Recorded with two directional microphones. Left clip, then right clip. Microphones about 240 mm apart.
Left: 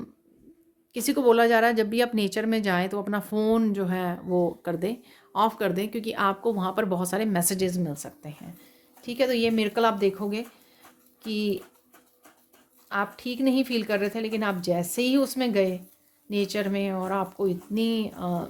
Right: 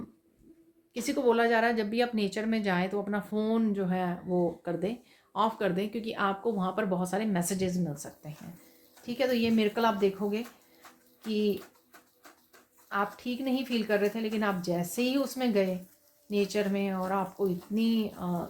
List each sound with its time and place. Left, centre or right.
0.9 s speech: left
12.9 s speech: left